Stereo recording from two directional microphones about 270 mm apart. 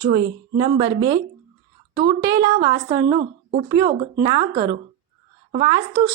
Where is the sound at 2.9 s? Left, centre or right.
Right.